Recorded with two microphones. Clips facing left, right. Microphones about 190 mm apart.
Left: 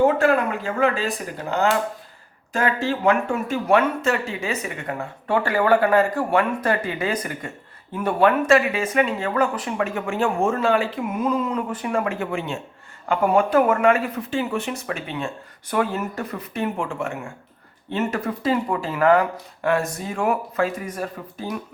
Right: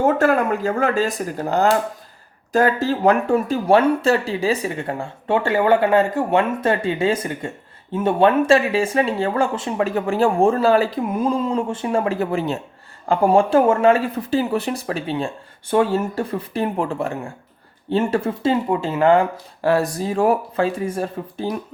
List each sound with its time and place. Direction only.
0.0 s speech: 40° right (ahead or behind)